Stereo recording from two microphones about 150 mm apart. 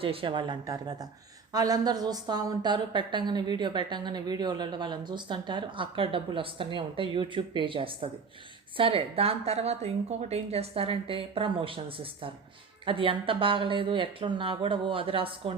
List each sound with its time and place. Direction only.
0.0 s a woman's voice: 35° right (ahead or behind)